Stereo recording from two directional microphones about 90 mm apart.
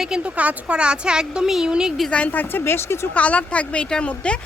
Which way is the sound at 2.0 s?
15° left (ahead or behind).